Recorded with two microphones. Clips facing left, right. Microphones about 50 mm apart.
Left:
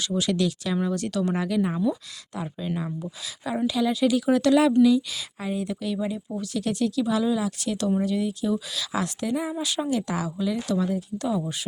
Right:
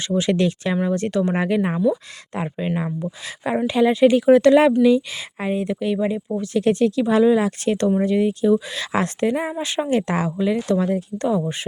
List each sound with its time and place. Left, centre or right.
0.1 s speech: right
11.3 s speech: right